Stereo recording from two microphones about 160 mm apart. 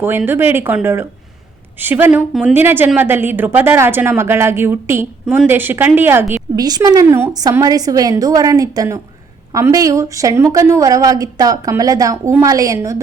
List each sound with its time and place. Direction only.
0.0 s a woman's voice: 15° right (ahead or behind)